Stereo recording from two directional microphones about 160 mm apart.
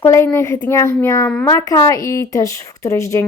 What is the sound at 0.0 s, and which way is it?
Speech, 15° left (ahead or behind).